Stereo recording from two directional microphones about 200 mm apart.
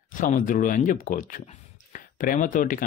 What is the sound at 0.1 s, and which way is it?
Speech, 40° left (ahead or behind).